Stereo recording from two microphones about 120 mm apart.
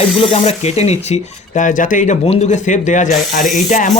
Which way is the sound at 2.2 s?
65° left (ahead or behind).